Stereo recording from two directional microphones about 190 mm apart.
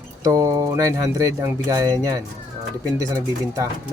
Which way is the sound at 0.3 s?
15° right (ahead or behind).